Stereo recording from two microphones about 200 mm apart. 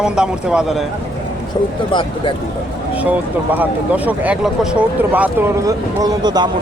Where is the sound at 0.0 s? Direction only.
5° right (ahead or behind).